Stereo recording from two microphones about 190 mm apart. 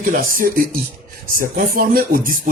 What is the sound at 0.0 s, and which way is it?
Speech, 45° right (ahead or behind).